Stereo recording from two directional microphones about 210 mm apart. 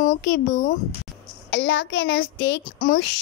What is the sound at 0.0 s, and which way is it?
Speech, 40° left (ahead or behind).